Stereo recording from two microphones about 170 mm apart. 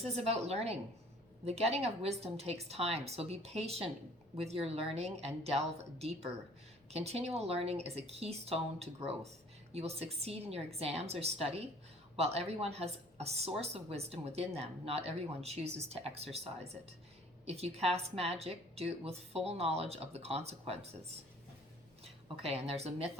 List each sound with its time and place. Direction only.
0.1 s speech: 40° right (ahead or behind)
22.0 s speech: 35° right (ahead or behind)